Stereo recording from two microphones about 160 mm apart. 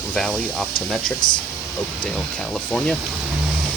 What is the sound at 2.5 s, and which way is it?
Speech, 5° left (ahead or behind).